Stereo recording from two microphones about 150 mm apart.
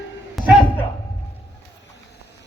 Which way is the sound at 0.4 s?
Centre (ahead or behind).